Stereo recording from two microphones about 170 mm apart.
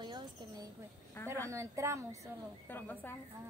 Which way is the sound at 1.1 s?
15° left (ahead or behind).